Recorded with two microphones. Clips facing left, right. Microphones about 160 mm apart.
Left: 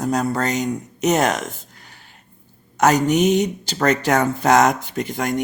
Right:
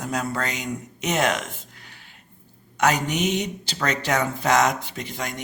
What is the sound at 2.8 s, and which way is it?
Speech, 45° left (ahead or behind).